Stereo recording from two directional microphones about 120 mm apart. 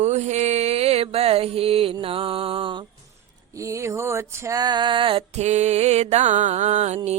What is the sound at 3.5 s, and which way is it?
Music, 25° right (ahead or behind).